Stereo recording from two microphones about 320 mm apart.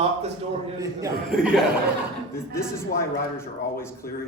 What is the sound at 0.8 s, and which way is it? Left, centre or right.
Speech, centre.